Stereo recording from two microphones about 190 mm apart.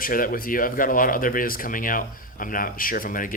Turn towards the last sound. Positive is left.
turn(degrees=45)  # may be behind; listen again after turning